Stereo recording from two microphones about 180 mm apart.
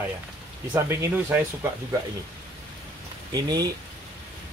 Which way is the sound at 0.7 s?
10° right (ahead or behind).